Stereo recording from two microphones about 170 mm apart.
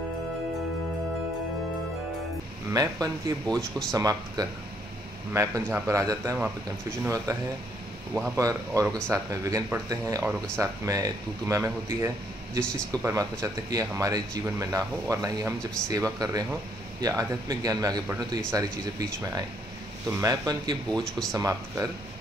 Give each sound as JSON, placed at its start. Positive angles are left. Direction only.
{"t": 2.7, "sound": "speech", "side_deg": -20}
{"t": 3.4, "sound": "speech", "side_deg": 5}
{"t": 3.9, "sound": "a man's voice", "side_deg": -20}
{"t": 8.4, "sound": "speech", "side_deg": -20}
{"t": 12.6, "sound": "speech", "side_deg": 5}
{"t": 13.0, "sound": "speech", "side_deg": -20}
{"t": 20.9, "sound": "speech", "side_deg": 0}
{"t": 21.4, "sound": "speech", "side_deg": -20}